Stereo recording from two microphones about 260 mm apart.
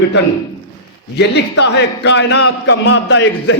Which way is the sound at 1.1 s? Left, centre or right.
Left.